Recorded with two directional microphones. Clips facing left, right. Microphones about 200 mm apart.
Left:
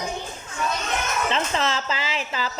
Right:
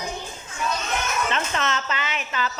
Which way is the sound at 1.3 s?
30° left (ahead or behind).